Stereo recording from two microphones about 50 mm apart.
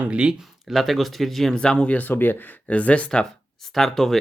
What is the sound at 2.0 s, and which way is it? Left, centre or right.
Speech, left.